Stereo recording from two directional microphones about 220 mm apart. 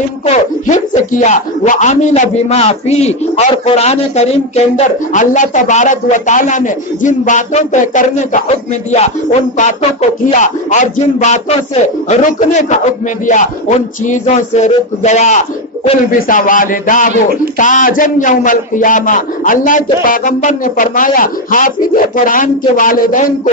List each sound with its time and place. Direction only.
0.2 s speech: 30° left (ahead or behind)